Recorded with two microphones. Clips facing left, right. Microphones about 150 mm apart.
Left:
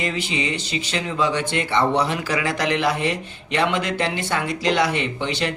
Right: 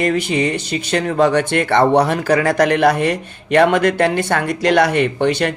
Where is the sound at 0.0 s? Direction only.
50° right (ahead or behind).